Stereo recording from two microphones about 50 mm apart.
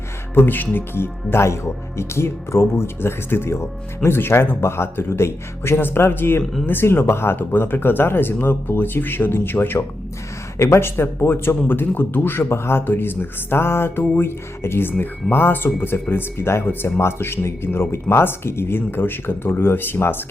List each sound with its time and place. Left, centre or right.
0.3 s speech: left
10.8 s speech: left